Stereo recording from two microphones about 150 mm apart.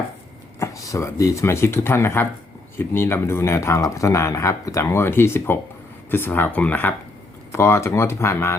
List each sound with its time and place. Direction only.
0.6 s speech: 20° left (ahead or behind)